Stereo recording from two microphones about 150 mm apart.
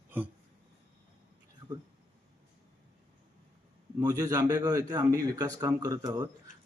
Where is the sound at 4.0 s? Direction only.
25° right (ahead or behind).